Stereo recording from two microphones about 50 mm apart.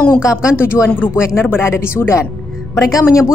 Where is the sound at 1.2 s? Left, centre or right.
Left.